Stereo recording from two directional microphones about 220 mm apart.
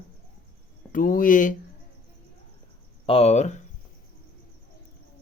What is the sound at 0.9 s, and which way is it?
Speech, 40° left (ahead or behind).